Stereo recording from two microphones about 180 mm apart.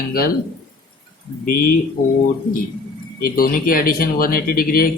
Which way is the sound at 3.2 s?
55° left (ahead or behind).